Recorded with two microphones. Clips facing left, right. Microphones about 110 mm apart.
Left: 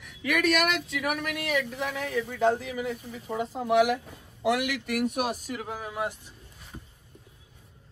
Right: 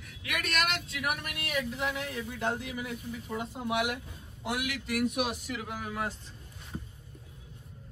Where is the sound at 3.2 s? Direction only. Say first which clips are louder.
Left 7 dB; 65° left (ahead or behind).